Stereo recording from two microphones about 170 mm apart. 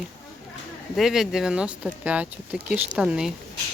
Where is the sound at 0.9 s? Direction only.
Centre (ahead or behind).